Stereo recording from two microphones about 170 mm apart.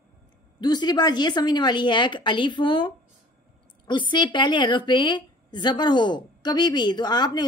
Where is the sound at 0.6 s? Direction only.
25° left (ahead or behind).